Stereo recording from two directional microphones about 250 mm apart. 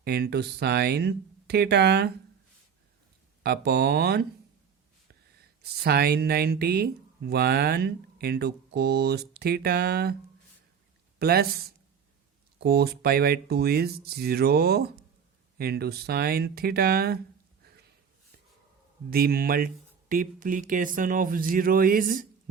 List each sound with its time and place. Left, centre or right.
0.0 s speech: right
3.4 s speech: right
5.7 s speech: right
11.2 s speech: right
19.1 s speech: right